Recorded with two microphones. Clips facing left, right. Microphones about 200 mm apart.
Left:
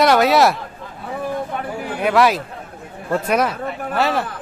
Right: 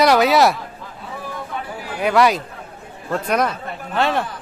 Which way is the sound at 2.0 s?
Centre (ahead or behind).